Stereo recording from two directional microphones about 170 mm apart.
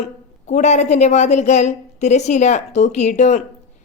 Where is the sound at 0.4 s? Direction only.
40° left (ahead or behind).